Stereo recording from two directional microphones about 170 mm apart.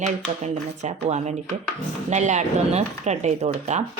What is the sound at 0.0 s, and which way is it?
Speech, 40° right (ahead or behind).